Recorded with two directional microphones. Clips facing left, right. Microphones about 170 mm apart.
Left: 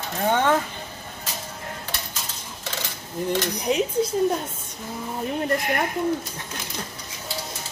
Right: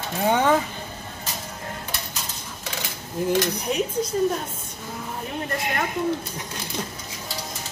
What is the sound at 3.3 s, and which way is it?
Speech, 10° right (ahead or behind).